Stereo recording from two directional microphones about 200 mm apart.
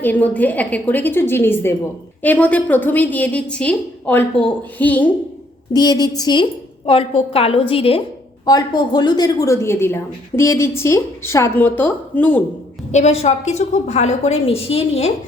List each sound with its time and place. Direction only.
0.0 s a woman's voice: 10° left (ahead or behind)
5.7 s a woman's voice: 20° left (ahead or behind)
12.9 s a woman's voice: 35° left (ahead or behind)